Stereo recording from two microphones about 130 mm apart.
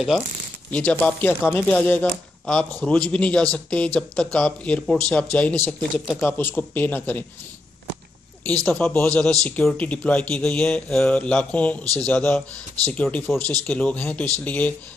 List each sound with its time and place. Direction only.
0.7 s a man's voice: 10° left (ahead or behind)
6.2 s a man's voice: 15° left (ahead or behind)
8.6 s a man's voice: 5° left (ahead or behind)